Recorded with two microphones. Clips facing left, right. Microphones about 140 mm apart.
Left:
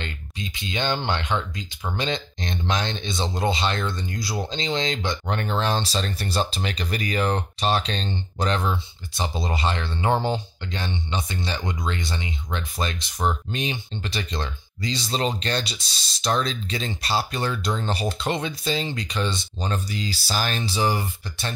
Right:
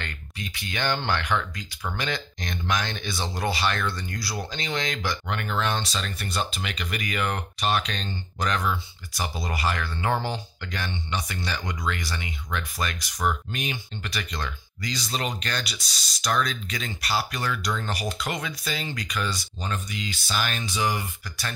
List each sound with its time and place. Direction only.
0.0 s speech: 20° left (ahead or behind)